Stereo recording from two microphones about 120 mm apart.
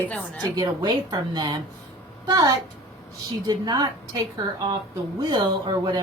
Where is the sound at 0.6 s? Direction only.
35° right (ahead or behind).